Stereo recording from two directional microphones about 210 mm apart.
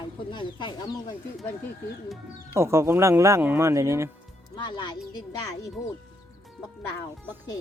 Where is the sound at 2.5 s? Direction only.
15° right (ahead or behind).